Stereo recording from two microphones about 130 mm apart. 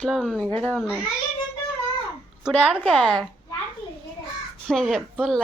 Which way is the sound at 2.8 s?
10° left (ahead or behind).